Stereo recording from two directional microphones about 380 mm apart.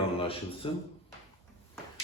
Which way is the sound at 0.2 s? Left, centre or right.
Centre.